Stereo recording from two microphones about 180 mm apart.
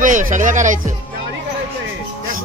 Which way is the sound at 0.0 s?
45° right (ahead or behind).